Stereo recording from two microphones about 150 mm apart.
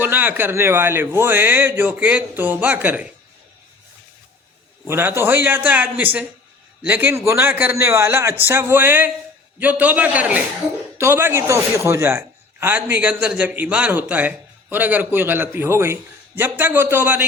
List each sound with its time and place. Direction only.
0.0 s a man's voice: 10° right (ahead or behind)
4.9 s a man's voice: 15° right (ahead or behind)